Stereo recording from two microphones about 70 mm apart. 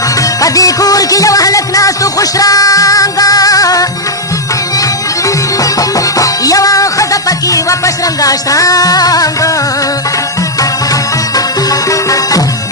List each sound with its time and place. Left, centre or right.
0.2 s music: left
11.3 s music: left